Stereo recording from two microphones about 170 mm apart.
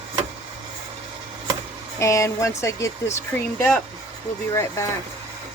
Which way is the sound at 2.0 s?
20° left (ahead or behind).